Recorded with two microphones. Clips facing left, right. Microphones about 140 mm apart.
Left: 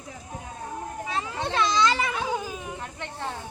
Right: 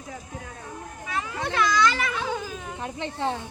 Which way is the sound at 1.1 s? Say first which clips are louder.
Right 1 dB; 25° left (ahead or behind).